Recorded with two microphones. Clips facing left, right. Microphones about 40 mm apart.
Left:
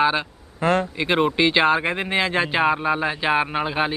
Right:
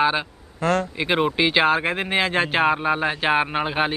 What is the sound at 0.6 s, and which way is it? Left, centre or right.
Speech, left.